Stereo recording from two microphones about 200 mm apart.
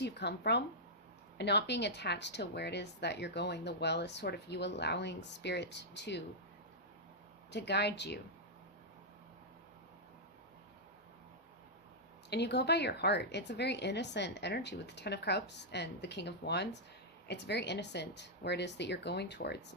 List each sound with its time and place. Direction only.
0.0 s speech: 55° left (ahead or behind)
7.5 s speech: 60° left (ahead or behind)
12.3 s speech: 55° left (ahead or behind)